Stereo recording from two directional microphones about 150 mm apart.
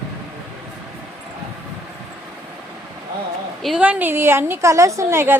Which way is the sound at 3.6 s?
5° right (ahead or behind).